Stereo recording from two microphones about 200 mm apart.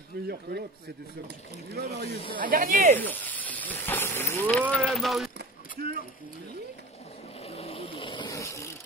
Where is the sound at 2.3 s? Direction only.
40° right (ahead or behind).